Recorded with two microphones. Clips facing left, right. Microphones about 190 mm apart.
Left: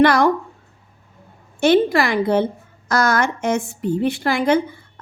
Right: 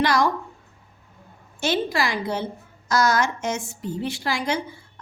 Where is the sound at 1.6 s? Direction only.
60° left (ahead or behind).